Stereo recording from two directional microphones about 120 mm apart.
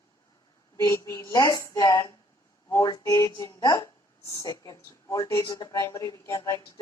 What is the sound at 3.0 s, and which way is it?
A woman's voice, 25° left (ahead or behind).